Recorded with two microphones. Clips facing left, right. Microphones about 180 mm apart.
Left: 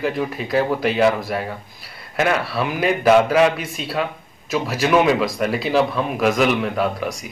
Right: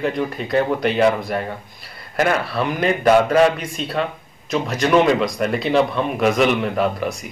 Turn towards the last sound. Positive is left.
turn(degrees=0)  # may be behind; listen again after turning